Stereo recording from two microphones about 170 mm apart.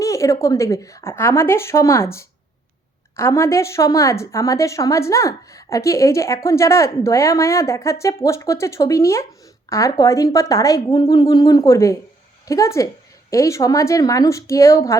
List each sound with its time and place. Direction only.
0.0 s speech: 20° left (ahead or behind)